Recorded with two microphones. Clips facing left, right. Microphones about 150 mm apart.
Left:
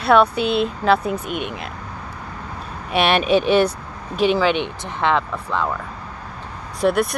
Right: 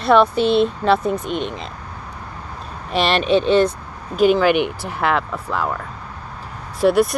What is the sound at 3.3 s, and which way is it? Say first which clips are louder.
Speech: right 2 dB; 25° right (ahead or behind).